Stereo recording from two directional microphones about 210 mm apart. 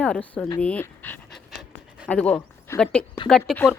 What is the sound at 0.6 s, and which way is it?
Dog, 5° left (ahead or behind).